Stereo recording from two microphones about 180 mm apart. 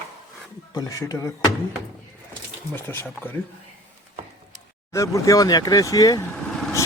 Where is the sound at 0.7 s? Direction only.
20° left (ahead or behind).